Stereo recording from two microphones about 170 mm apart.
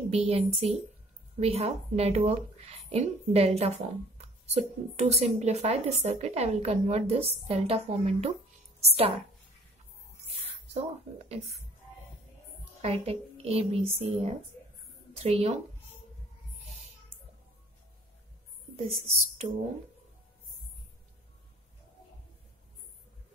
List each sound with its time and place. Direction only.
0.1 s a woman's voice: 35° right (ahead or behind)
10.7 s a woman's voice: 40° right (ahead or behind)
12.8 s a woman's voice: 35° right (ahead or behind)
18.8 s a woman's voice: 35° right (ahead or behind)